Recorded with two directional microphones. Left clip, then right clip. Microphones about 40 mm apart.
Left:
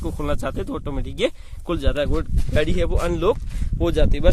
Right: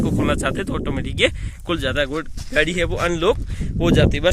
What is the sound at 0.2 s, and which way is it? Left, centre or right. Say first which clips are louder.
Speech: right 3 dB; centre.